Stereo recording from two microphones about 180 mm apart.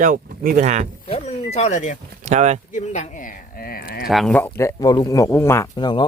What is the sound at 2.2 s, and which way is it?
Speech, 40° right (ahead or behind).